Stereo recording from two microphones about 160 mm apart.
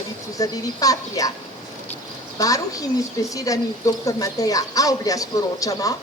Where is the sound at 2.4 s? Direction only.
20° left (ahead or behind).